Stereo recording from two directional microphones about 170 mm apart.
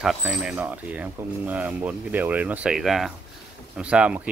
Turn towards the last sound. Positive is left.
turn(degrees=-5)  # may be behind; listen again after turning